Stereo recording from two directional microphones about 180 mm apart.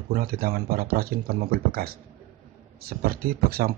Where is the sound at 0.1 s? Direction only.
55° right (ahead or behind).